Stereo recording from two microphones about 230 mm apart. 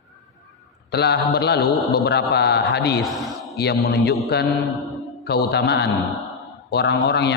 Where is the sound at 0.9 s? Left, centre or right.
Left.